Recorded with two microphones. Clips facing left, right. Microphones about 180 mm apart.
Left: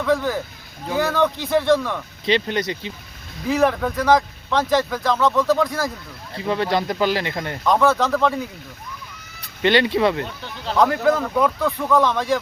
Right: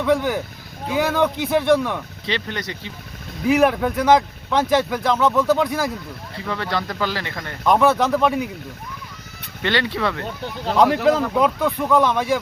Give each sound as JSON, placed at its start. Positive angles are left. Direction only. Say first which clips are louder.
{"t": 0.0, "sound": "speech", "louder": "right 1 dB", "side_deg": -15}
{"t": 2.2, "sound": "speech", "louder": "left 7 dB", "side_deg": 20}
{"t": 3.5, "sound": "speech", "louder": "right 2 dB", "side_deg": -10}
{"t": 6.4, "sound": "speech", "louder": "left 5 dB", "side_deg": 20}
{"t": 7.6, "sound": "speech", "louder": "right 1 dB", "side_deg": -15}
{"t": 9.6, "sound": "speech", "louder": "left 5 dB", "side_deg": 20}
{"t": 10.8, "sound": "speech", "louder": "right 1 dB", "side_deg": -20}